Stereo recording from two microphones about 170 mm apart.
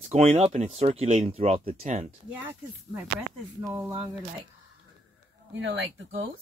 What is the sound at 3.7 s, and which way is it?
Speech, 20° right (ahead or behind).